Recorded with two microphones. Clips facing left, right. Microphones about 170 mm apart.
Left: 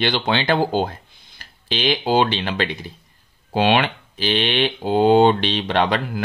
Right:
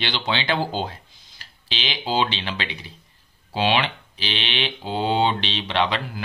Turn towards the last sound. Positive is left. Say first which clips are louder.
# left 4 dB
turn(degrees=45)  # may be behind; listen again after turning